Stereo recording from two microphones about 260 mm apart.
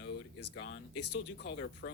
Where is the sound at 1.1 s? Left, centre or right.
Left.